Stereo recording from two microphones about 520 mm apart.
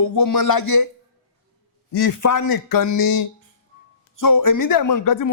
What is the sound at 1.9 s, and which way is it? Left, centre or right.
Speech, left.